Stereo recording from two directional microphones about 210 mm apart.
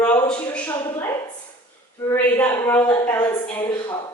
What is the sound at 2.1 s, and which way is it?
A woman's voice, 10° left (ahead or behind).